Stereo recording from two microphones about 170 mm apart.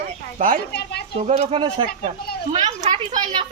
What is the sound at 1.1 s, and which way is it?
Speech, 45° right (ahead or behind).